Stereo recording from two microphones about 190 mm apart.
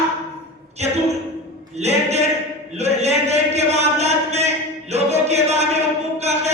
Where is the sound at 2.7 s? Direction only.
35° right (ahead or behind).